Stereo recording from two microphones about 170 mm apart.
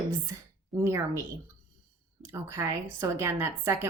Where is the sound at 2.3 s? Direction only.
15° right (ahead or behind).